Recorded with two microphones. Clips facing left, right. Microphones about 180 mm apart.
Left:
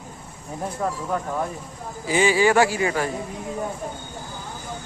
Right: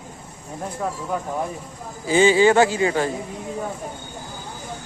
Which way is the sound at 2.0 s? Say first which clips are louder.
Right 4 dB; 25° right (ahead or behind).